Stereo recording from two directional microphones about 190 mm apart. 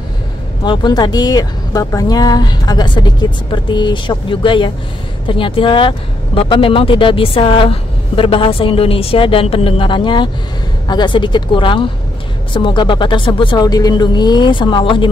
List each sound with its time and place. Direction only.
0.7 s speech: 25° left (ahead or behind)